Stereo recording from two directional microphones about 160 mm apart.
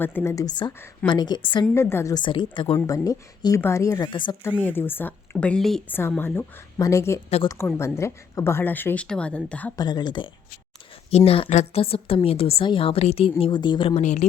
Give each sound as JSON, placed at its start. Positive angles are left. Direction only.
{"t": 0.0, "sound": "a woman's voice", "side_deg": 10}
{"t": 1.7, "sound": "a woman's voice", "side_deg": 15}
{"t": 4.6, "sound": "speech", "side_deg": 10}
{"t": 5.9, "sound": "speech", "side_deg": 15}
{"t": 9.7, "sound": "a woman's voice", "side_deg": 25}
{"t": 11.3, "sound": "a woman's voice", "side_deg": 40}